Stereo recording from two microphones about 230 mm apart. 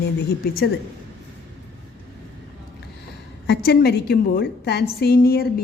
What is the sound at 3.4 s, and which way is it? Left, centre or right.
A woman's voice, left.